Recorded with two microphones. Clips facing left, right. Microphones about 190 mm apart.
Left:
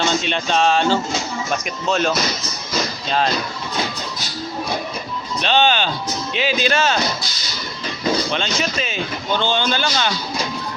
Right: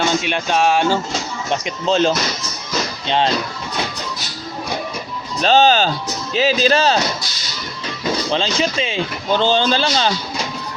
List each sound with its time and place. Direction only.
0.2 s speech: 10° right (ahead or behind)
1.5 s speech: 30° right (ahead or behind)
5.4 s speech: 40° right (ahead or behind)
8.3 s speech: 30° right (ahead or behind)